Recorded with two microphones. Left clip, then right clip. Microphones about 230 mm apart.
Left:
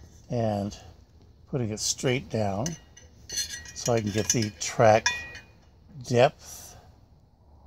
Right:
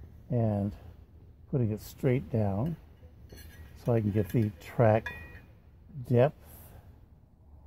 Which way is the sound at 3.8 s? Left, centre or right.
Centre.